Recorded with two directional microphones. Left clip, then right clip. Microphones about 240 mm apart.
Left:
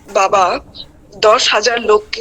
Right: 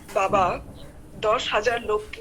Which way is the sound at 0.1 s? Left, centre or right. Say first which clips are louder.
Left 9 dB; left.